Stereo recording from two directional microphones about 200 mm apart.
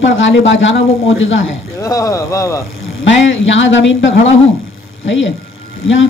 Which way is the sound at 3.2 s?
70° left (ahead or behind).